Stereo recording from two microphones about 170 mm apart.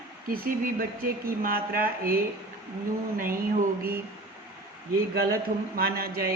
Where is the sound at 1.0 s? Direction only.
60° right (ahead or behind).